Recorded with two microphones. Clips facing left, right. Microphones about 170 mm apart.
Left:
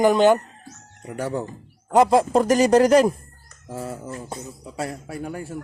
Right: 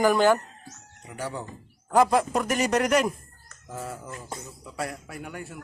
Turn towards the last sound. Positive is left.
turn(degrees=30)  # may be behind; listen again after turning